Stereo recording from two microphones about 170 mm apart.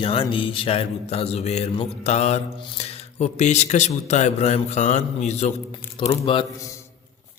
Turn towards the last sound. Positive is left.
turn(degrees=30)  # may be behind; listen again after turning